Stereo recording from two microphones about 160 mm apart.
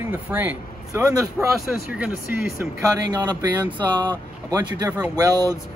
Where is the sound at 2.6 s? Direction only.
20° right (ahead or behind).